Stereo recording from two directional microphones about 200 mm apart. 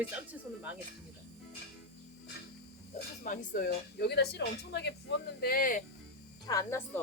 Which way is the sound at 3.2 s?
45° left (ahead or behind).